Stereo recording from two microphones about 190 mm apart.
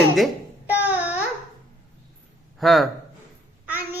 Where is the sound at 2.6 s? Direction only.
Centre (ahead or behind).